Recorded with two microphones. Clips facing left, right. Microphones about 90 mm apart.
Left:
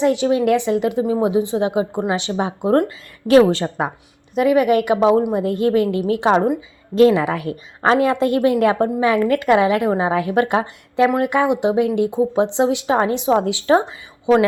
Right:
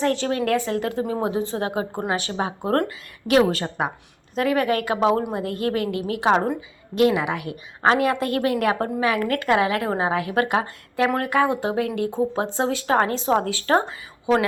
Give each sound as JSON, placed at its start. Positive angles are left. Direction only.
{"t": 0.0, "sound": "speech", "side_deg": 10}
{"t": 3.2, "sound": "a woman's voice", "side_deg": 30}
{"t": 6.3, "sound": "speech", "side_deg": 10}
{"t": 6.9, "sound": "a woman's voice", "side_deg": 35}